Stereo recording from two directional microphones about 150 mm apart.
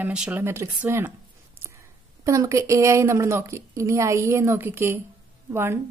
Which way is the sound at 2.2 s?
20° right (ahead or behind).